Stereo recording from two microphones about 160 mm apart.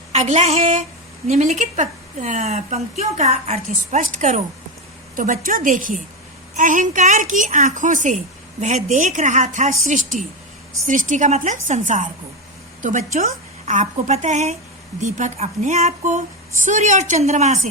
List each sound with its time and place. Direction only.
0.1 s a woman's voice: 45° right (ahead or behind)